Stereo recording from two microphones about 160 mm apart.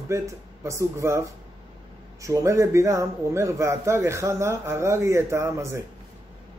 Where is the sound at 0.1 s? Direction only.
20° right (ahead or behind).